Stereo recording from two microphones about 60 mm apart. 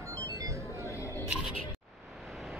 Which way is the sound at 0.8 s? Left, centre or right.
Left.